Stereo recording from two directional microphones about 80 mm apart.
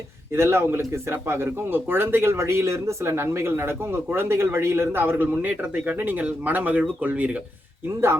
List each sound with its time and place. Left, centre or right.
0.3 s a man's voice: right